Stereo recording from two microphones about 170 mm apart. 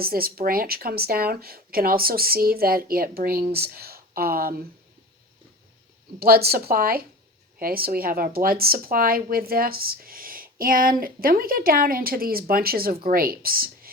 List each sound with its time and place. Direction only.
0.0 s speech: 60° right (ahead or behind)
6.1 s speech: 65° right (ahead or behind)